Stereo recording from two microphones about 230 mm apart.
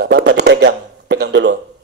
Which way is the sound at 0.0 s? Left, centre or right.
Right.